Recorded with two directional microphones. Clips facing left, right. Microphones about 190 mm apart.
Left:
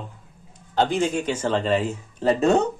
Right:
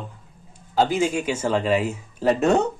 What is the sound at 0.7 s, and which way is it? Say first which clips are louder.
Speech: right 1 dB; 5° right (ahead or behind).